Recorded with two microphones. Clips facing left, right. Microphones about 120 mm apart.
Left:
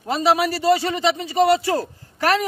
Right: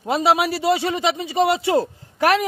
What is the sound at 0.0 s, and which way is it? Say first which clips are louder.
A man's voice: right 1 dB; 20° right (ahead or behind).